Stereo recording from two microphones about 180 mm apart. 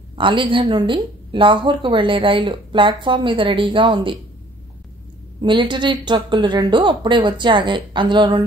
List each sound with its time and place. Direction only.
0.1 s a woman's voice: 30° right (ahead or behind)
5.4 s a woman's voice: 25° right (ahead or behind)